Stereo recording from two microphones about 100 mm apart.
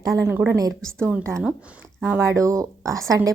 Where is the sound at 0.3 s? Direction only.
20° right (ahead or behind).